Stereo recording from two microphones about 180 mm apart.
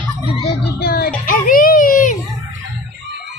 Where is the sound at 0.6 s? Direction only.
60° left (ahead or behind).